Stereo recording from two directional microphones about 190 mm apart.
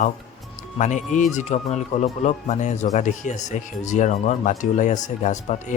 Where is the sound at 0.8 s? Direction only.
40° left (ahead or behind).